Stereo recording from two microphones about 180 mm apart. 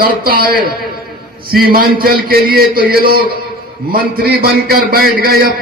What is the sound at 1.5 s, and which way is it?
Music, 55° right (ahead or behind).